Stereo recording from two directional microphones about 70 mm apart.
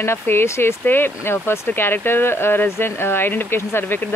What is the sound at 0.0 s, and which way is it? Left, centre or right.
Speech, left.